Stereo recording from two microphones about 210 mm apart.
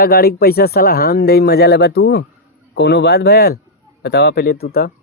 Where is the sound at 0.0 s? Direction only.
50° left (ahead or behind).